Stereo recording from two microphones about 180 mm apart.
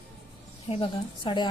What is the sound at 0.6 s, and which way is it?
Speech, 30° left (ahead or behind).